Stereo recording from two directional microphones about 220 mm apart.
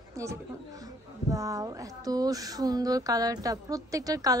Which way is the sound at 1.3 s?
15° right (ahead or behind).